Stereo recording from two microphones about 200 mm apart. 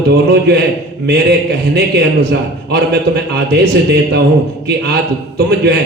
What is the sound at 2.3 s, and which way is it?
Speech, 55° right (ahead or behind).